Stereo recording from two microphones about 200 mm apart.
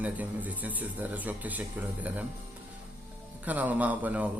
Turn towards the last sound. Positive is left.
turn(degrees=-5)  # may be behind; listen again after turning